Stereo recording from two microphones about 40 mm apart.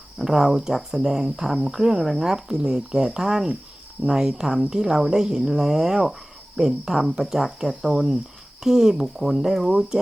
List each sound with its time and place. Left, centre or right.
0.2 s speech: centre